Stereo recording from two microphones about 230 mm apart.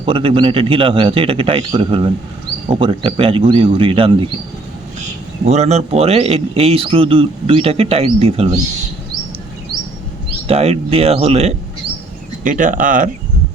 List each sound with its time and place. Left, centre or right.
0.0 s a man's voice: right
5.5 s a man's voice: right
10.5 s a man's voice: right